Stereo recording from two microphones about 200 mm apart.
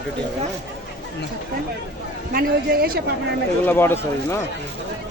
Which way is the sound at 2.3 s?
50° right (ahead or behind).